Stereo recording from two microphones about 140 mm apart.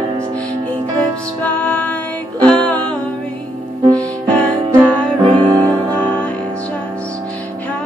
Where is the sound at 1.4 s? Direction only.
10° left (ahead or behind).